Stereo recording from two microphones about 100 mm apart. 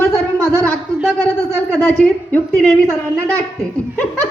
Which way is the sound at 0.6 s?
10° left (ahead or behind).